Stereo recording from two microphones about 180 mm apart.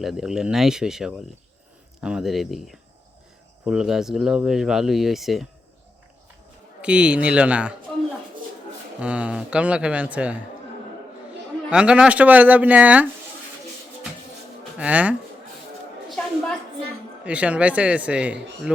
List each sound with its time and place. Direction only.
0.0 s speech: centre (ahead or behind)
6.8 s speech: 5° right (ahead or behind)
9.0 s speech: 5° right (ahead or behind)
11.7 s speech: 5° right (ahead or behind)
14.8 s speech: 10° right (ahead or behind)
16.0 s a sound: centre (ahead or behind)
17.2 s speech: 5° right (ahead or behind)